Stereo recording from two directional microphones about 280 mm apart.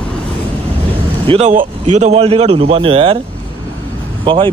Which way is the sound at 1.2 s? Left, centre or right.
Right.